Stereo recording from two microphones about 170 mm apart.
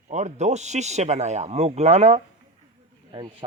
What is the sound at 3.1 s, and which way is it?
Speech, 30° right (ahead or behind).